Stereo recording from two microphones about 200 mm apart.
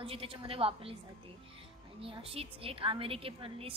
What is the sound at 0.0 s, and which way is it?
Speech, 25° right (ahead or behind).